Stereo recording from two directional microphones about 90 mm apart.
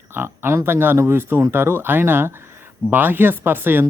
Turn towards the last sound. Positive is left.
turn(degrees=-25)  # may be behind; listen again after turning